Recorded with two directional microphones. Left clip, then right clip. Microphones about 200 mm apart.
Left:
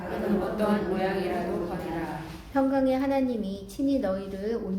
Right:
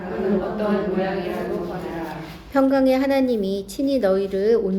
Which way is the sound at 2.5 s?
50° right (ahead or behind).